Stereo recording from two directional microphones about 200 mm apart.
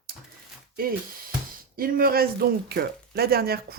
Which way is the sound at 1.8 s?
45° right (ahead or behind).